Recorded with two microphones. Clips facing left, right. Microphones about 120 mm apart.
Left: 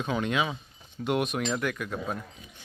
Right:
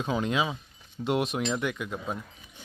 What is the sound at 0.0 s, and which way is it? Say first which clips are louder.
Speech: even; 25° right (ahead or behind).